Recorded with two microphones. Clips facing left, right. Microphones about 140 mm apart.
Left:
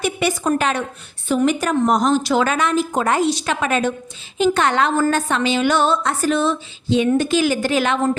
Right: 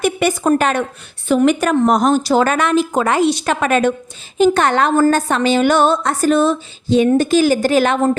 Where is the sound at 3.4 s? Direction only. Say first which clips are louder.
Right 5 dB; 55° right (ahead or behind).